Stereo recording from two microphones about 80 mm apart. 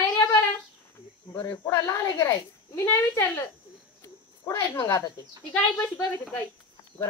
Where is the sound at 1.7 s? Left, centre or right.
Left.